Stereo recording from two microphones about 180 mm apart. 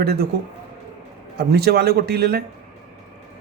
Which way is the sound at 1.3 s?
60° right (ahead or behind).